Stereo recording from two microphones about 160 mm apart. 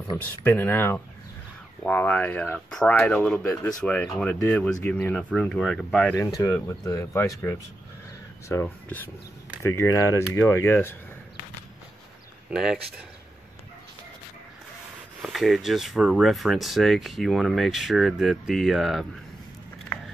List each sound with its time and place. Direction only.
0.4 s speech: 15° left (ahead or behind)
6.7 s speech: 20° left (ahead or behind)
12.4 s speech: centre (ahead or behind)
15.2 s speech: centre (ahead or behind)